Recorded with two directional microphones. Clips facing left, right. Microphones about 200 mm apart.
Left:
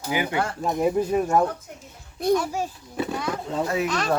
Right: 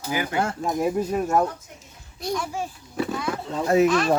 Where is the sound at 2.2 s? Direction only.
55° left (ahead or behind).